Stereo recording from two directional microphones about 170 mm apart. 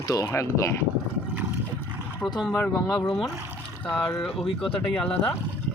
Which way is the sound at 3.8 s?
5° left (ahead or behind).